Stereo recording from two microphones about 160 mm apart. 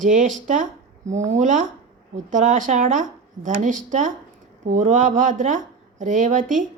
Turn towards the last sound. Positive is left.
turn(degrees=-55)  # may be behind; listen again after turning